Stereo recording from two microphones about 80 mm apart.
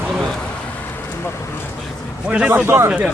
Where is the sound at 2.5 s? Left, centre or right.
Right.